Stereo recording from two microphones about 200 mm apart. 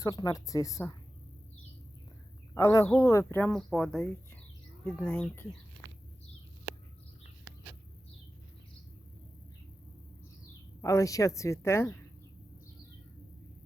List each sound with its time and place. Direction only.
0.0 s speech: 20° left (ahead or behind)
2.6 s speech: 15° left (ahead or behind)
10.8 s speech: 15° left (ahead or behind)